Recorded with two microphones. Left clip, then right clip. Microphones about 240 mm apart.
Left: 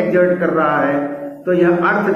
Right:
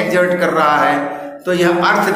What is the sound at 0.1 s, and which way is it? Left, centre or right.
A man's voice, right.